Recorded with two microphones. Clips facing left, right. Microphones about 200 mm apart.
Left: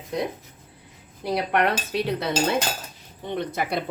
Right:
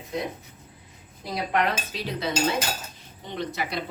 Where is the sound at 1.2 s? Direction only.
65° left (ahead or behind).